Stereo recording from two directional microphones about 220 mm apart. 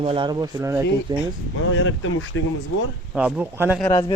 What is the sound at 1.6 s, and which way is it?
Speech, 60° left (ahead or behind).